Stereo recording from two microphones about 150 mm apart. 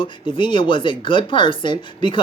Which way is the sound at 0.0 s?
35° left (ahead or behind).